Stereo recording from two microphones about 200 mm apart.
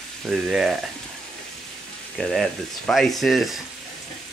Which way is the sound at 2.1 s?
Centre (ahead or behind).